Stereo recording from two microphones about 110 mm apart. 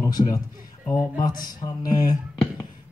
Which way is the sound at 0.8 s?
35° left (ahead or behind).